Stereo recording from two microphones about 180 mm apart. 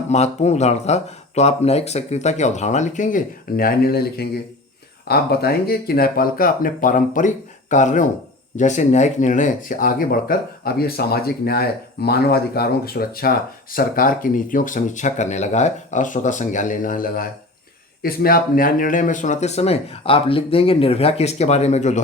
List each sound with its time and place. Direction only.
0.1 s speech: 40° left (ahead or behind)